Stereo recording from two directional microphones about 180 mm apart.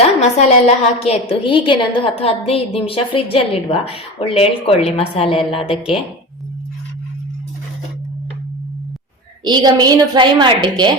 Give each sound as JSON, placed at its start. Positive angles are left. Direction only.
{"t": 0.0, "sound": "a woman's voice", "side_deg": 35}
{"t": 9.4, "sound": "a woman's voice", "side_deg": -25}